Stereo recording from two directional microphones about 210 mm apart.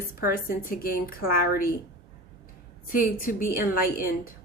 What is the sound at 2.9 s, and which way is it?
A woman's voice, 40° left (ahead or behind).